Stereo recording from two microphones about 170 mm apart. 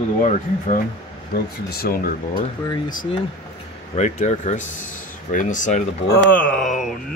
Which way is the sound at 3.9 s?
45° left (ahead or behind).